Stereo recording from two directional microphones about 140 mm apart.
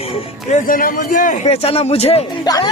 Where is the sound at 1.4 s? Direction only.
45° left (ahead or behind).